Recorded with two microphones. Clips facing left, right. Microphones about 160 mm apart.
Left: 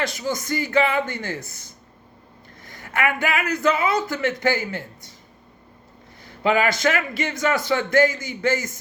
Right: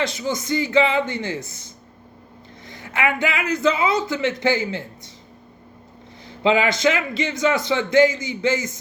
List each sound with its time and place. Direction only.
0.0 s a man's voice: 20° right (ahead or behind)
2.6 s a man's voice: 20° right (ahead or behind)
6.2 s a man's voice: 20° right (ahead or behind)